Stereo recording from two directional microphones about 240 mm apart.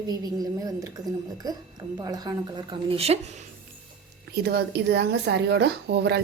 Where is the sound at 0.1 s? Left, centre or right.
Centre.